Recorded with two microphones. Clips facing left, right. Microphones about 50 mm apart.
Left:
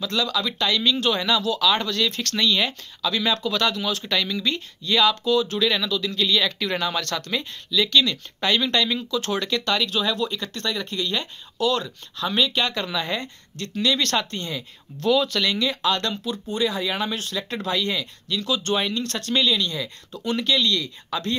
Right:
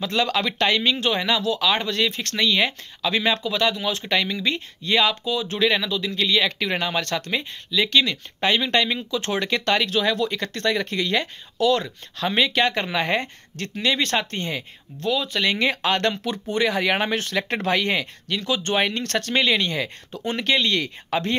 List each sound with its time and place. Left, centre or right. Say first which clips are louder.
0.0 s speech: right 2 dB; right
3.4 s speech: right 1 dB; centre; by 13.7 s right
13.7 s speech: even; right
14.9 s speech: left 1 dB; centre
15.4 s speech: right 1 dB; right